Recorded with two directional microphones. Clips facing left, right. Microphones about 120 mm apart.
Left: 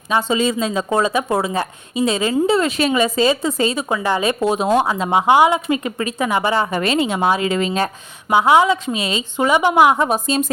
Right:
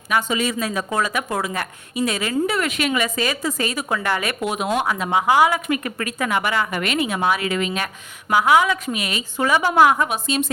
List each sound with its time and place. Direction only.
0.1 s a woman's voice: 25° left (ahead or behind)
10.1 s a woman's voice: 35° left (ahead or behind)